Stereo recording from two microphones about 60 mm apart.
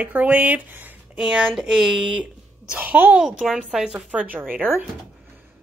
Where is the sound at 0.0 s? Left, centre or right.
Right.